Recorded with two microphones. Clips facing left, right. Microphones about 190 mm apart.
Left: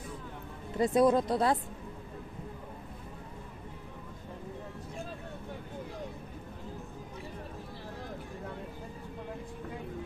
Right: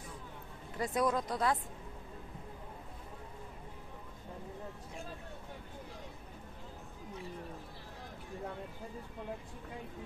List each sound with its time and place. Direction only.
0.7 s speech: 30° left (ahead or behind)